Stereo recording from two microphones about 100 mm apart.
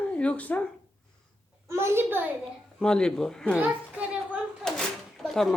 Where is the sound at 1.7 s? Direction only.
25° right (ahead or behind).